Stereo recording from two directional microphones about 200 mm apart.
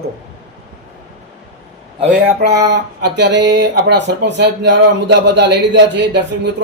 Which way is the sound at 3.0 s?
55° right (ahead or behind).